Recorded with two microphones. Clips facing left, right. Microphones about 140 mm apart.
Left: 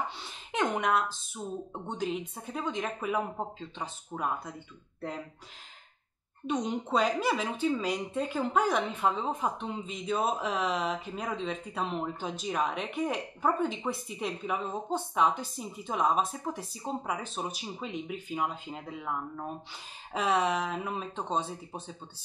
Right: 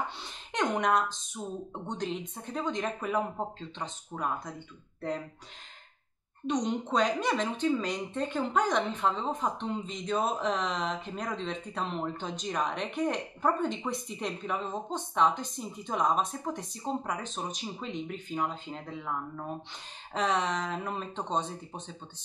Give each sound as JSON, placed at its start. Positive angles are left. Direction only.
{"t": 0.2, "sound": "speech", "side_deg": 5}
{"t": 6.4, "sound": "speech", "side_deg": 5}